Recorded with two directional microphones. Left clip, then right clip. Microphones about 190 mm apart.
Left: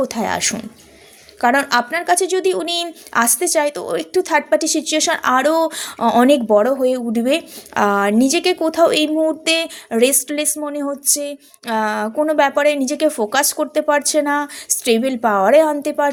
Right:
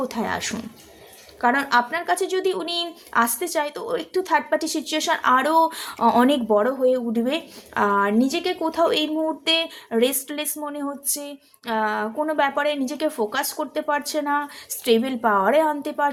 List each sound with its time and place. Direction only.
0.0 s a woman's voice: 30° left (ahead or behind)